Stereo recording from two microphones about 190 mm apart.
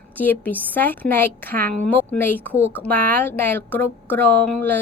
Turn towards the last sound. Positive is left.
turn(degrees=5)  # may be behind; listen again after turning